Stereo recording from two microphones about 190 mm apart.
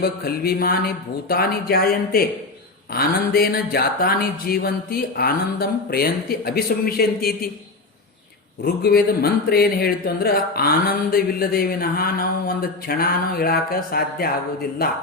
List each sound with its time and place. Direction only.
0.0 s speech: 55° left (ahead or behind)
8.6 s speech: 55° left (ahead or behind)